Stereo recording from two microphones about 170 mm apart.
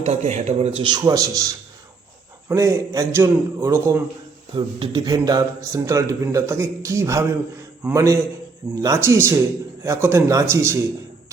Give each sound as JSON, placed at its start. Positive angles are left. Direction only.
{"t": 0.0, "sound": "a man's voice", "side_deg": -40}
{"t": 4.5, "sound": "a man's voice", "side_deg": -30}